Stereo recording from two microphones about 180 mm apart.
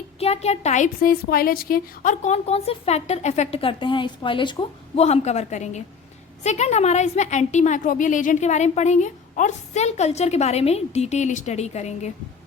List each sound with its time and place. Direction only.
0.2 s a woman's voice: 35° left (ahead or behind)